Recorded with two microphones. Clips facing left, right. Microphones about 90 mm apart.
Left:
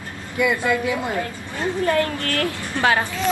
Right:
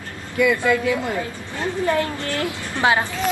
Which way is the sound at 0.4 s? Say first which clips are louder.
Right 2 dB; 25° left (ahead or behind).